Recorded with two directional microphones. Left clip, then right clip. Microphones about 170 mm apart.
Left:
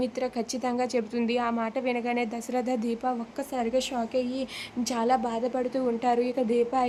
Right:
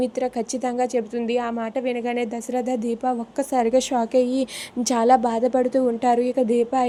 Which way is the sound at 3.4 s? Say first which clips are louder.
Right 11 dB; 30° right (ahead or behind).